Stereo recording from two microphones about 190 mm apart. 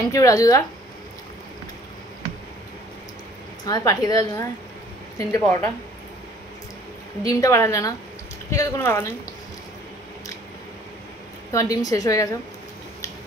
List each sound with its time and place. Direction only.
0.1 s a woman's voice: 20° left (ahead or behind)
3.6 s a woman's voice: 20° left (ahead or behind)
7.2 s a woman's voice: 15° left (ahead or behind)
11.5 s a woman's voice: 20° left (ahead or behind)